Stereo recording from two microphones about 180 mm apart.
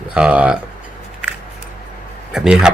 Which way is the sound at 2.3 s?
5° right (ahead or behind).